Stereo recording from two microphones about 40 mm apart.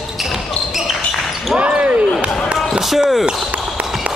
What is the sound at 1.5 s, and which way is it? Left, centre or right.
Basketball bounce, right.